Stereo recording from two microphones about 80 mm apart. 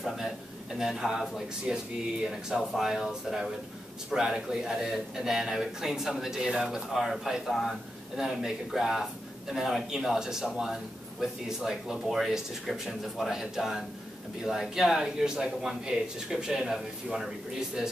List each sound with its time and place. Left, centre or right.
0.7 s a man's voice: centre